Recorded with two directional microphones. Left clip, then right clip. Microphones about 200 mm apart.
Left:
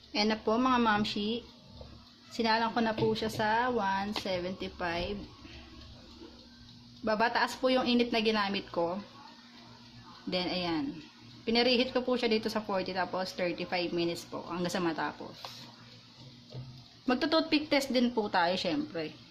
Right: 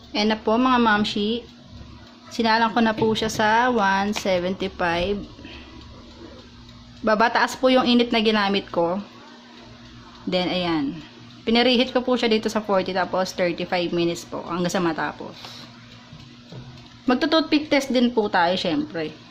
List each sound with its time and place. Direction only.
0.1 s speech: 5° right (ahead or behind)
7.0 s speech: 15° right (ahead or behind)
10.2 s speech: 10° right (ahead or behind)
17.1 s speech: 5° right (ahead or behind)